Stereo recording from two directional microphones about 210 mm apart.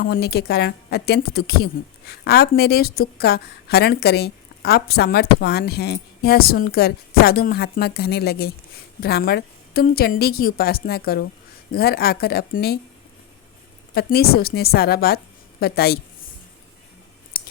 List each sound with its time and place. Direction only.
0.0 s a woman's voice: 50° left (ahead or behind)
13.9 s a woman's voice: 50° left (ahead or behind)